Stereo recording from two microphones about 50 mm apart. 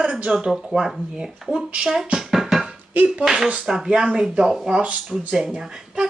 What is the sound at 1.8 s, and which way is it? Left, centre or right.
Music, centre.